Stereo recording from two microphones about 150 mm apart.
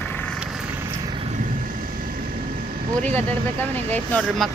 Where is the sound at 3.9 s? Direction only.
10° left (ahead or behind).